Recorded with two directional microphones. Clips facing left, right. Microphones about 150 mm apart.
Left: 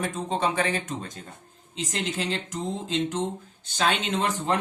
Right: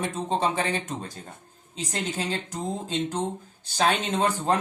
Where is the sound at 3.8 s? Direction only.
40° right (ahead or behind).